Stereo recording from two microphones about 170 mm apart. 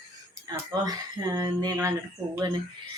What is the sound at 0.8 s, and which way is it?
A woman's voice, 20° right (ahead or behind).